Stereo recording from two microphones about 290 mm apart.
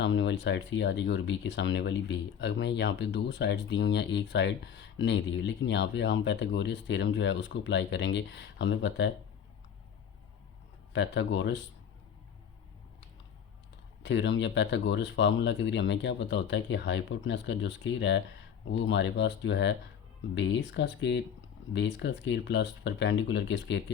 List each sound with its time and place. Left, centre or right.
0.0 s speech: left
10.9 s speech: left
14.0 s speech: left